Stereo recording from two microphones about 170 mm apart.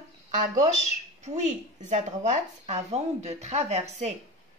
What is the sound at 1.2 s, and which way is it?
Speech, 45° right (ahead or behind).